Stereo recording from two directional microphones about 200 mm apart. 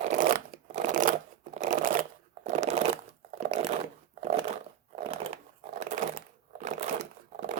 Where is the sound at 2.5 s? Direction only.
35° right (ahead or behind).